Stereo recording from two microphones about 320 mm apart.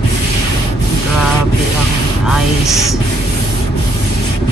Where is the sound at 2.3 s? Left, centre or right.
Centre.